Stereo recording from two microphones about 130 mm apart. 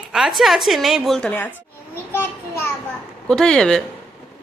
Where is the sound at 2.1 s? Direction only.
20° left (ahead or behind).